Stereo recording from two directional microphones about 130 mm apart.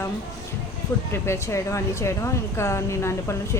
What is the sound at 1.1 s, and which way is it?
Speech, 20° left (ahead or behind).